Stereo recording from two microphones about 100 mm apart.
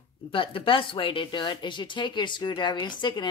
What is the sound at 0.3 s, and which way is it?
Speech, 60° left (ahead or behind).